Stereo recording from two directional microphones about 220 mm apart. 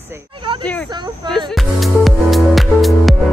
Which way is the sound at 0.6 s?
5° left (ahead or behind).